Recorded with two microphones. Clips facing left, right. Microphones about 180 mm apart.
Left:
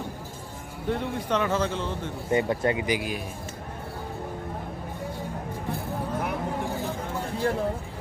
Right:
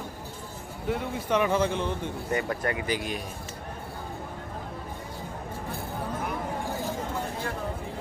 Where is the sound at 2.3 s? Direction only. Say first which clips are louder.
Left 5 dB; 25° left (ahead or behind).